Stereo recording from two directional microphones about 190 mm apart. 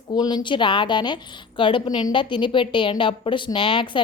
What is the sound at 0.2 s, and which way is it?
A woman's voice, 20° left (ahead or behind).